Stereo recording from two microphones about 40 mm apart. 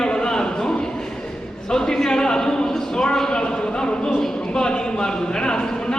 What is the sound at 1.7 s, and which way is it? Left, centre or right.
A man's voice, centre.